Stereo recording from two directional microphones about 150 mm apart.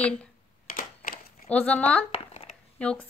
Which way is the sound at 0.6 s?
70° left (ahead or behind).